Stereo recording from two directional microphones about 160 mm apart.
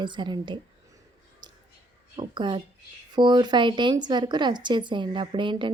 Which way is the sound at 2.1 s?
30° right (ahead or behind).